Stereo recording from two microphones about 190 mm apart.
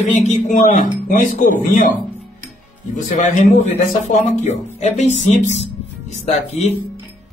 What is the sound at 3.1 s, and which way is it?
Speech, 40° left (ahead or behind).